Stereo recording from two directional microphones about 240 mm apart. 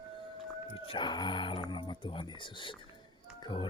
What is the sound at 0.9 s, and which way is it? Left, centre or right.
Speech, centre.